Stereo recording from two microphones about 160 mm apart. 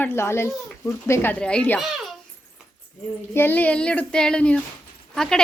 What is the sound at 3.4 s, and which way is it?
A child's voice, 10° left (ahead or behind).